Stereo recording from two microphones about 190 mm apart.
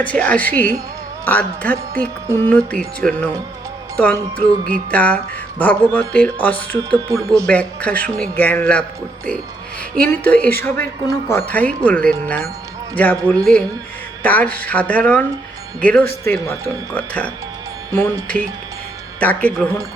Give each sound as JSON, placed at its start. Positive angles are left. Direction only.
{"t": 0.0, "sound": "speech", "side_deg": 5}
{"t": 7.1, "sound": "speech", "side_deg": -15}
{"t": 7.4, "sound": "speech", "side_deg": 5}
{"t": 10.1, "sound": "speech", "side_deg": 10}